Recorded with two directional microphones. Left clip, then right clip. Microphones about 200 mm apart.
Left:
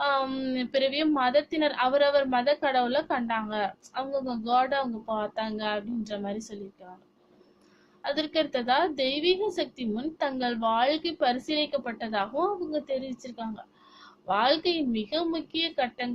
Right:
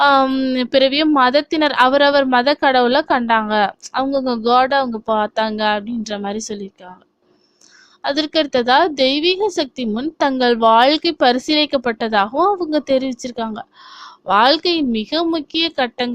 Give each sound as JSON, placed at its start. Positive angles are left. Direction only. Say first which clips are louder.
{"t": 0.0, "sound": "a woman's voice", "louder": "right 14 dB", "side_deg": -50}
{"t": 8.0, "sound": "a woman's voice", "louder": "right 10 dB", "side_deg": -50}